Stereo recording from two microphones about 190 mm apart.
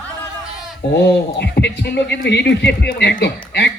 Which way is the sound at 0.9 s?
60° left (ahead or behind).